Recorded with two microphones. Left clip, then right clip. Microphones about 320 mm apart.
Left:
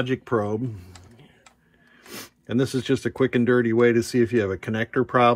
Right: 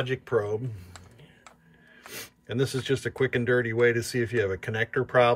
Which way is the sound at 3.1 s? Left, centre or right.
Centre.